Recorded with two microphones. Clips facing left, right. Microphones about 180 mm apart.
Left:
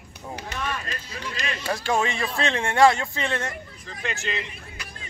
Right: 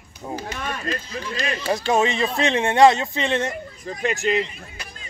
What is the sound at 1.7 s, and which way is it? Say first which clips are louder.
Speech: right 4 dB; 20° right (ahead or behind).